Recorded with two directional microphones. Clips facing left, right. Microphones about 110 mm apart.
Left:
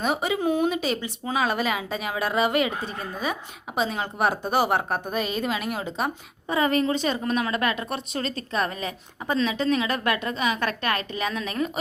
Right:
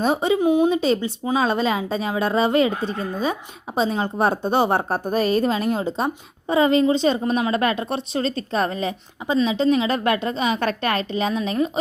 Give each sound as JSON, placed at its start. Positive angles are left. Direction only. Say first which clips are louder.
{"t": 0.0, "sound": "a woman's voice", "louder": "right 6 dB", "side_deg": -30}
{"t": 9.2, "sound": "speech", "louder": "right 5 dB", "side_deg": -15}